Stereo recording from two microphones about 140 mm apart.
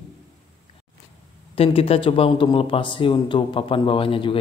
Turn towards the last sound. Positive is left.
turn(degrees=40)  # may be behind; listen again after turning